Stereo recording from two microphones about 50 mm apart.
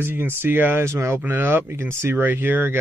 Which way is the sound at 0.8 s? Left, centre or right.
Right.